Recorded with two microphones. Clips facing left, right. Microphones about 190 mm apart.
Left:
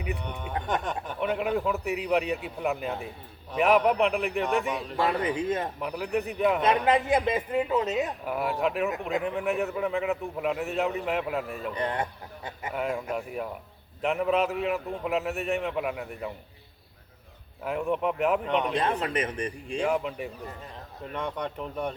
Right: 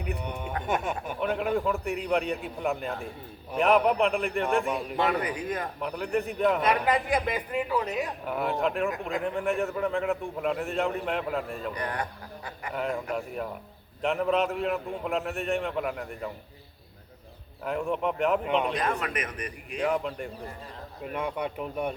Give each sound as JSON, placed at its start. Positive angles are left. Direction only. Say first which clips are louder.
{"t": 0.2, "sound": "speech", "louder": "right 1 dB", "side_deg": -10}
{"t": 1.3, "sound": "a man's voice", "louder": "even", "side_deg": 5}
{"t": 5.0, "sound": "a man's voice", "louder": "left 5 dB", "side_deg": 25}
{"t": 5.8, "sound": "a man's voice", "louder": "even", "side_deg": 5}
{"t": 6.6, "sound": "a man's voice", "louder": "left 2 dB", "side_deg": 25}
{"t": 8.2, "sound": "a man's voice", "louder": "even", "side_deg": 5}
{"t": 11.7, "sound": "a man's voice", "louder": "left 5 dB", "side_deg": 25}
{"t": 12.7, "sound": "a man's voice", "louder": "even", "side_deg": 5}
{"t": 17.6, "sound": "a man's voice", "louder": "left 1 dB", "side_deg": 5}
{"t": 18.7, "sound": "a man's voice", "louder": "left 2 dB", "side_deg": 30}
{"t": 19.8, "sound": "a man's voice", "louder": "even", "side_deg": 5}
{"t": 21.0, "sound": "speech", "louder": "right 1 dB", "side_deg": -10}